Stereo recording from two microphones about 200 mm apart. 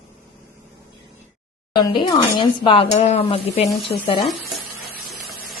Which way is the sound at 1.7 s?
20° left (ahead or behind).